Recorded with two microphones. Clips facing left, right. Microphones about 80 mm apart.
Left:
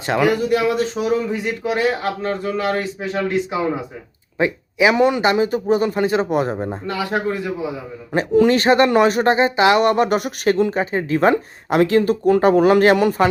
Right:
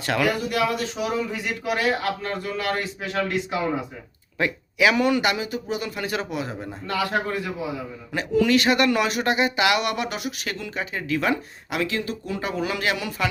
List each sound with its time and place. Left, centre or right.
0.0 s speech: left
4.4 s speech: left
6.2 s speech: left
6.8 s speech: left
8.1 s speech: left